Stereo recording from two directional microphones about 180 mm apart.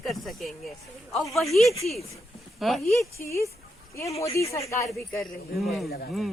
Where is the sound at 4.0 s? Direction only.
15° left (ahead or behind).